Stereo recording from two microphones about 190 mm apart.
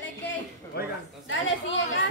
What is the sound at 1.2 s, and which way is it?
Speech, 70° left (ahead or behind).